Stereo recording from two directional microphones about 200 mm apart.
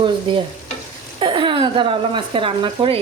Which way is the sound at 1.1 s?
25° right (ahead or behind).